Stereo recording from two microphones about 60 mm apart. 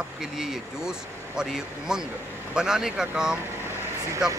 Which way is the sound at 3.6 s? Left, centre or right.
Right.